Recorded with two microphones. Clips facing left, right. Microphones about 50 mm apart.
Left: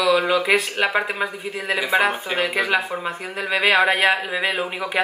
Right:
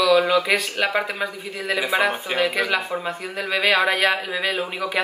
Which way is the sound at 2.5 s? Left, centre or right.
Left.